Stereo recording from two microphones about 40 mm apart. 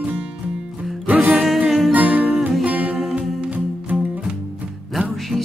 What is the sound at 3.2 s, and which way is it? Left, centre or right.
Music, right.